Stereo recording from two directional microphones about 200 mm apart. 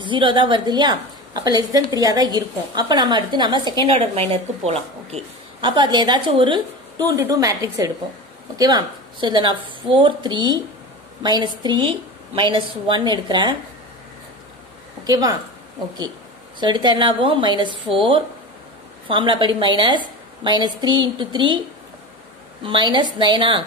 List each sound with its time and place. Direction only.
0.0 s a woman's voice: 25° right (ahead or behind)
15.0 s a woman's voice: 20° right (ahead or behind)
16.5 s a woman's voice: 20° right (ahead or behind)
22.6 s a woman's voice: 25° right (ahead or behind)